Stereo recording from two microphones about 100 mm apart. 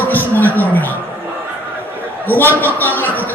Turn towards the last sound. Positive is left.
turn(degrees=15)  # may be behind; listen again after turning